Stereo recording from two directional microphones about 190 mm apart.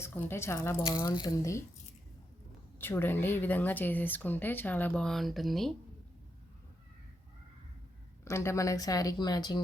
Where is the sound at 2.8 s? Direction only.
10° left (ahead or behind).